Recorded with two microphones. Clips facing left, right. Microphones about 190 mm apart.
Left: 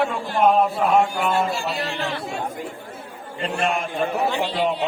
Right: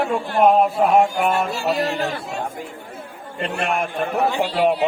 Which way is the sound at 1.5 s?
40° right (ahead or behind).